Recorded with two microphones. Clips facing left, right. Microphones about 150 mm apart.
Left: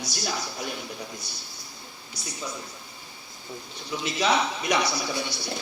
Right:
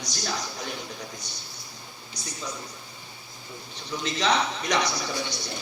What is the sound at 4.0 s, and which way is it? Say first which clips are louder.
A man's voice: left 1 dB; 10° left (ahead or behind).